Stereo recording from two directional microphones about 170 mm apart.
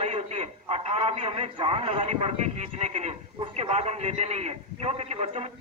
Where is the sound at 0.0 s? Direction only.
35° right (ahead or behind).